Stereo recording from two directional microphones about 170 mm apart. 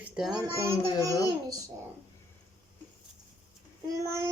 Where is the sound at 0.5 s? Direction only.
15° right (ahead or behind).